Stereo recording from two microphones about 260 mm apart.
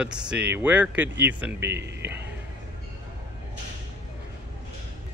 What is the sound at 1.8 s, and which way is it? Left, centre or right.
Speech, right.